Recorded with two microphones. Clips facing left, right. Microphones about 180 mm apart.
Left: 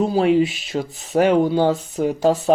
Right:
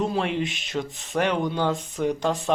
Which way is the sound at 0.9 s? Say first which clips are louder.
Left 9 dB; 40° left (ahead or behind).